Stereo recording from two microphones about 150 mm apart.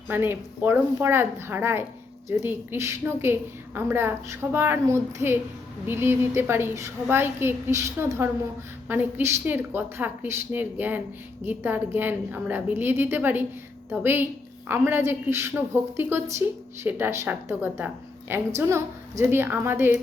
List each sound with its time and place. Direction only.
0.1 s a woman's voice: 15° right (ahead or behind)